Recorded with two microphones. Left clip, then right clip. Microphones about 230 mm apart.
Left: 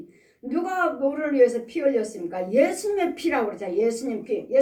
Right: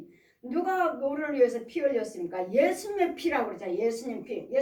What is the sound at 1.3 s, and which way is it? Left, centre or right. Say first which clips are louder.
Speech: left 5 dB; left.